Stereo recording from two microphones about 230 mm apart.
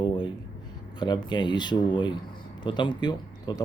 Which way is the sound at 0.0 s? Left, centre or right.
Centre.